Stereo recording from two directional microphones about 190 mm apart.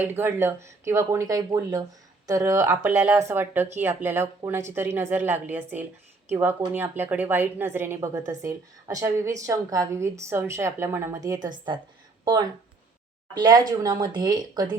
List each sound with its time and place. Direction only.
0.0 s a woman's voice: 10° right (ahead or behind)